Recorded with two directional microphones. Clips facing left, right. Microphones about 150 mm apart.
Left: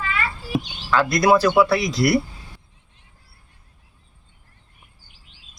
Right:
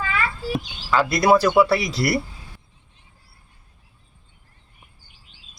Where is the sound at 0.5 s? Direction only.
Centre (ahead or behind).